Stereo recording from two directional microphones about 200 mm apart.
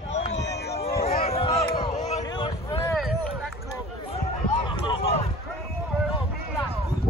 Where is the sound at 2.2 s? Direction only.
20° left (ahead or behind).